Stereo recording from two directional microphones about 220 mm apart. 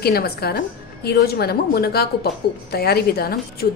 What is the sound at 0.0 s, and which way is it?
A woman's voice, 45° left (ahead or behind).